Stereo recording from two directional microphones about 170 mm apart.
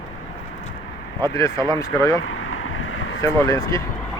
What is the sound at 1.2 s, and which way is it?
Speech, 20° left (ahead or behind).